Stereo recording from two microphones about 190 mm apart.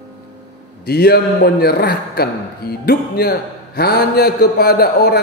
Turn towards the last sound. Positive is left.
turn(degrees=55)  # may be behind; listen again after turning